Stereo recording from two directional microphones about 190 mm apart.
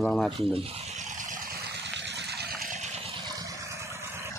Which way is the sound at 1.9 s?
65° right (ahead or behind).